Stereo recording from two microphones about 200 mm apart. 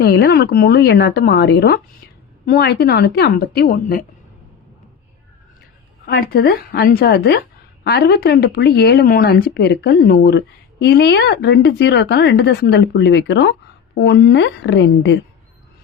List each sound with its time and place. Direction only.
0.0 s speech: 55° left (ahead or behind)
6.1 s speech: 50° left (ahead or behind)